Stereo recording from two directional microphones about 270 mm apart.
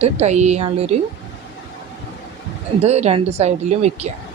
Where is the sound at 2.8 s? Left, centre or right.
Right.